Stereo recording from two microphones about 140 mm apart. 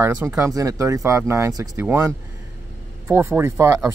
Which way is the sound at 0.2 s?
20° right (ahead or behind).